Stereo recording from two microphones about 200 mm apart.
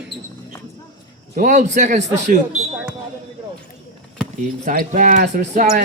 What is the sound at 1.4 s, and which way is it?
Speech, 40° right (ahead or behind).